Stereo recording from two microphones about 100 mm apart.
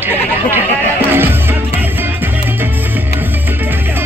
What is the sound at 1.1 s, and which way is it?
Music, 20° right (ahead or behind).